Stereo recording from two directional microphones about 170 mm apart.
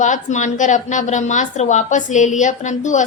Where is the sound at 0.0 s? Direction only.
45° left (ahead or behind).